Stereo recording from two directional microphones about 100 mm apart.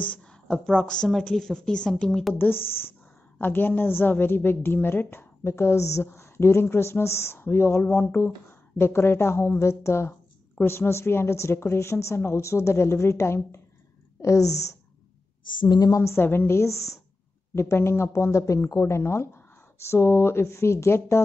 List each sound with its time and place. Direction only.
0.0 s a woman's voice: 10° left (ahead or behind)
2.3 s a woman's voice: 20° left (ahead or behind)
15.4 s a woman's voice: 45° left (ahead or behind); by 21.2 s 25° left (ahead or behind)